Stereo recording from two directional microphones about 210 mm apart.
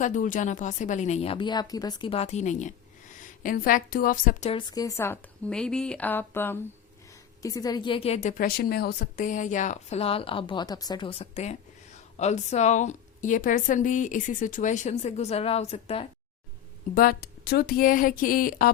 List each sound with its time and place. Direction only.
0.0 s a woman's voice: 40° left (ahead or behind)
16.9 s speech: 45° left (ahead or behind)